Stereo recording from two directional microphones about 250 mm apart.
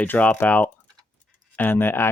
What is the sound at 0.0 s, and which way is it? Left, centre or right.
Speech, centre.